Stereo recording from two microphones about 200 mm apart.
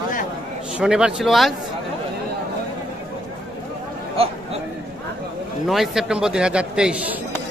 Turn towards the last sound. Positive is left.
turn(degrees=-5)  # may be behind; listen again after turning